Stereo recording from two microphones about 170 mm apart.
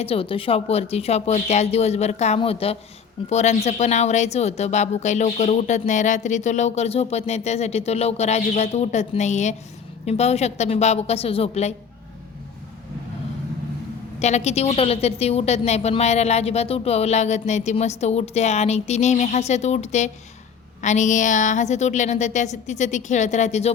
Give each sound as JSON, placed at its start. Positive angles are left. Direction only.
{"t": 0.0, "sound": "speech", "side_deg": 35}
{"t": 14.2, "sound": "a woman's voice", "side_deg": 40}